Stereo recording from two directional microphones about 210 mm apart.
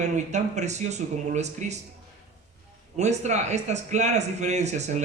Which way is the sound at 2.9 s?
35° right (ahead or behind).